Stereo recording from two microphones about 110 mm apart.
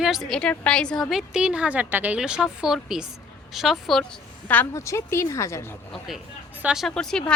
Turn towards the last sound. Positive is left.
turn(degrees=5)  # may be behind; listen again after turning